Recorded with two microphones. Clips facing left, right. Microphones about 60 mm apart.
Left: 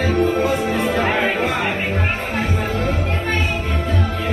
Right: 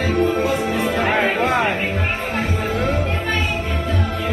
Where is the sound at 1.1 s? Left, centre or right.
Right.